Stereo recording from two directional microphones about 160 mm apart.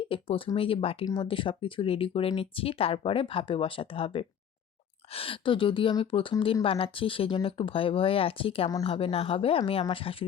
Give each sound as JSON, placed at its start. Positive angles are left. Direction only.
{"t": 0.1, "sound": "speech", "side_deg": 35}